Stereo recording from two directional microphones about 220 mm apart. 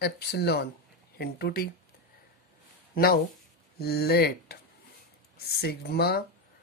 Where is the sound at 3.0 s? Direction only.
45° left (ahead or behind).